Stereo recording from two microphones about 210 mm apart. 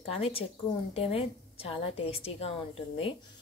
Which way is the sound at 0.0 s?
30° left (ahead or behind).